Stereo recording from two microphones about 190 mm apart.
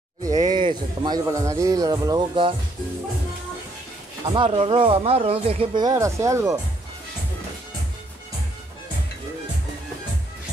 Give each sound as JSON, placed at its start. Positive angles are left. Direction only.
{"t": 0.2, "sound": "speech", "side_deg": -20}
{"t": 4.3, "sound": "speech", "side_deg": -30}
{"t": 5.9, "sound": "speech", "side_deg": -15}